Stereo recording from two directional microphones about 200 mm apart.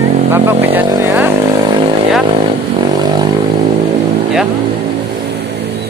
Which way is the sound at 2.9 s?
20° right (ahead or behind).